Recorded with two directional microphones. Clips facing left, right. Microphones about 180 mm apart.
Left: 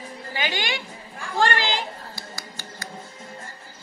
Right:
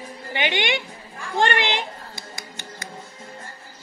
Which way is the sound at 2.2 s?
20° right (ahead or behind).